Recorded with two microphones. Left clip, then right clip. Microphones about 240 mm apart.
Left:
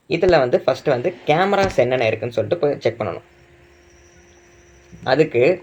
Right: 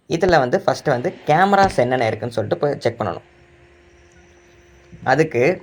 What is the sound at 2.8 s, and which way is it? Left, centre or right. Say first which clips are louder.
Speech: even; centre.